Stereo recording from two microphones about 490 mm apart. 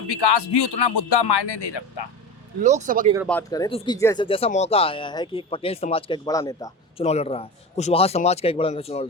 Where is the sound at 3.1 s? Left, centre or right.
Centre.